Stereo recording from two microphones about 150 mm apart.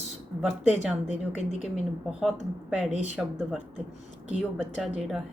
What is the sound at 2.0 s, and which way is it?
Speech, 5° right (ahead or behind).